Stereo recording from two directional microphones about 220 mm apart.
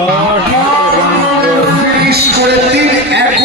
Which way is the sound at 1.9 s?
45° right (ahead or behind).